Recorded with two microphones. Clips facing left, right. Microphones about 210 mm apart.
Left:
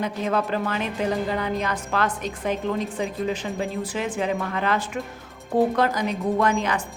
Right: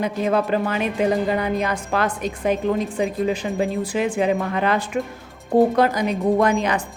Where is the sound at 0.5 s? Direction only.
15° right (ahead or behind).